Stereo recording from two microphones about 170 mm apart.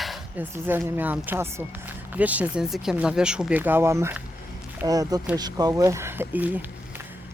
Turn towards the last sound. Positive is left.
turn(degrees=-10)  # may be behind; listen again after turning